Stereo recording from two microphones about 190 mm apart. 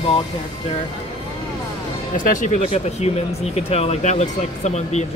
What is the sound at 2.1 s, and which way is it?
Speech, 45° left (ahead or behind).